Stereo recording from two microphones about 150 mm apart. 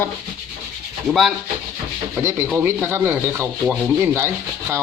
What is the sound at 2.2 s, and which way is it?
Speech, 15° right (ahead or behind).